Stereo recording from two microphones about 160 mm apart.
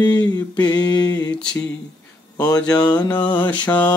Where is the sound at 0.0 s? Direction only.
25° left (ahead or behind).